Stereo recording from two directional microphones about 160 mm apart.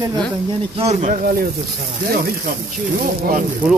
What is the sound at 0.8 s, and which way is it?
Speech, 45° right (ahead or behind).